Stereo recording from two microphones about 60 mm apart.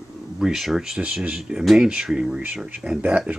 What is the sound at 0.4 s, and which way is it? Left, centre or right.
Speech, centre.